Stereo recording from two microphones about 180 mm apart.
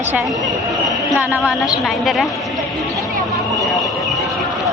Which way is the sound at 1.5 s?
Centre (ahead or behind).